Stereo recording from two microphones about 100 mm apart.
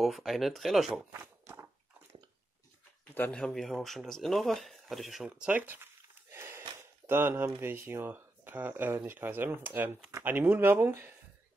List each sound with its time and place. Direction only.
0.0 s speech: centre (ahead or behind)
1.2 s a sound: 25° right (ahead or behind)
3.3 s speech: 5° left (ahead or behind); by 11.1 s 20° right (ahead or behind)